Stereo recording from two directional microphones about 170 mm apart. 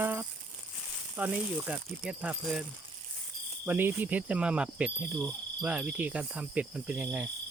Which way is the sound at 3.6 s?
10° right (ahead or behind).